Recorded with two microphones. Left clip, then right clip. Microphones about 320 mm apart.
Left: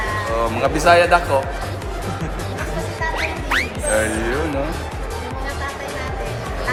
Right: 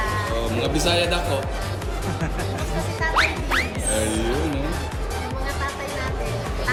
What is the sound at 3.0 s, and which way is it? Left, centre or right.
Music, centre.